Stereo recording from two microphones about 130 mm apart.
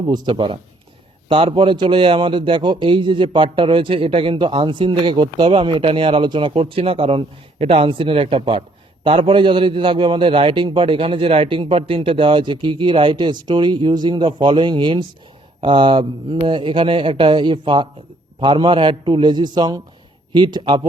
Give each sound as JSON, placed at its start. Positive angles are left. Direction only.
{"t": 0.1, "sound": "a man's voice", "side_deg": -35}